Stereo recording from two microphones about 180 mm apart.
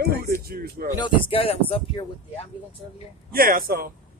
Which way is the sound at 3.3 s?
55° right (ahead or behind).